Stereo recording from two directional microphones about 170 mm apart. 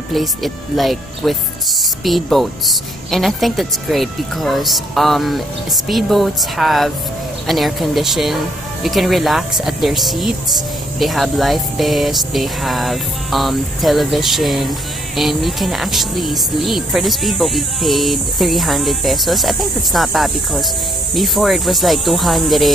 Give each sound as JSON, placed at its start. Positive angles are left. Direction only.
{"t": 0.1, "sound": "speech", "side_deg": 0}